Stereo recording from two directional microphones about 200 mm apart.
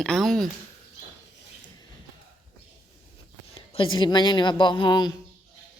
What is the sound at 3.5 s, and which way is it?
Speech, 25° left (ahead or behind).